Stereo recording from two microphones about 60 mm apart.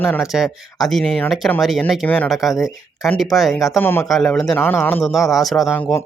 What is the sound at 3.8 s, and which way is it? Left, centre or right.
Speech, left.